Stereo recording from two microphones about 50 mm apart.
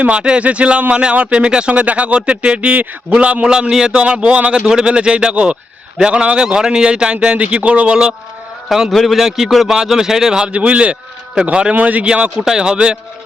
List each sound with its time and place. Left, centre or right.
0.0 s a man's voice: right
4.0 s a man's voice: right
8.7 s a man's voice: centre; by 11.7 s right
11.7 s speech: right
12.4 s a man's voice: centre